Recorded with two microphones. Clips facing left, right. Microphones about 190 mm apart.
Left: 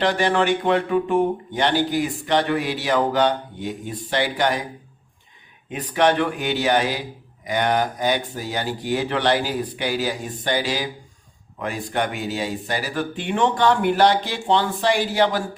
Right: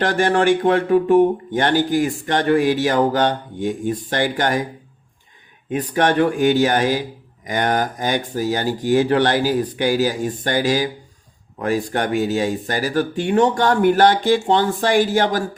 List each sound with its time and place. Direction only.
0.0 s speech: 45° right (ahead or behind)
5.7 s speech: 45° right (ahead or behind)